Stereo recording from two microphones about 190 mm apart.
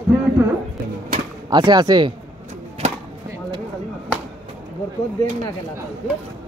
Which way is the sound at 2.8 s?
35° right (ahead or behind).